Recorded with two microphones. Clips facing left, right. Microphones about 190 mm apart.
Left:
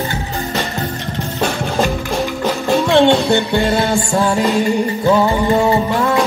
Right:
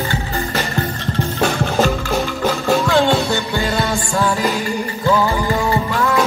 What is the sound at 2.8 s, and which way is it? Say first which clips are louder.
Music: left 7 dB; 25° left (ahead or behind).